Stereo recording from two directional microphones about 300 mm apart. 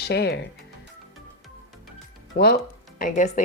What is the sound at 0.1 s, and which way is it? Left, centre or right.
Speech, left.